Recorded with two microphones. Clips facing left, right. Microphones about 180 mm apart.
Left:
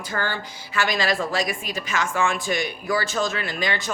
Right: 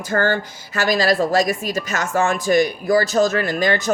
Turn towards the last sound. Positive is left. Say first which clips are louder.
# right 8 dB
turn(degrees=-45)  # may be behind; listen again after turning